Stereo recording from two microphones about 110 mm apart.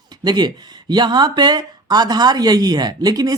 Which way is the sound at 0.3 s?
40° right (ahead or behind).